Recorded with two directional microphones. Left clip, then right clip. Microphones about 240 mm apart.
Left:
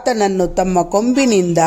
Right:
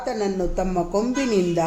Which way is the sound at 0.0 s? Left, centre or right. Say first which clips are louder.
Left 9 dB; left.